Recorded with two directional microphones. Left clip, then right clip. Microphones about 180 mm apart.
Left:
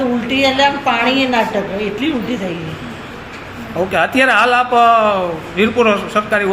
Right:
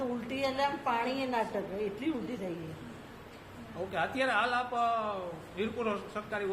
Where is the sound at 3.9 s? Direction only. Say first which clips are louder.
Left 18 dB; 45° left (ahead or behind).